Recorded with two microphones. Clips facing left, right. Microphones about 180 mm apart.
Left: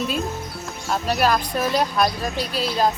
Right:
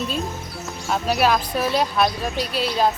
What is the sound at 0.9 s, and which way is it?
Speech, 10° right (ahead or behind).